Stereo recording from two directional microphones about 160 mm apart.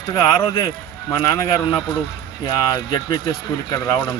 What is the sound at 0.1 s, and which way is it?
A man's voice, 25° left (ahead or behind).